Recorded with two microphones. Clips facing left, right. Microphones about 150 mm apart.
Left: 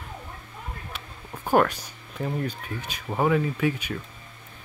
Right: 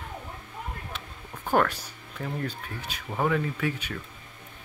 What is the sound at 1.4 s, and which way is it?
Speech, 15° left (ahead or behind).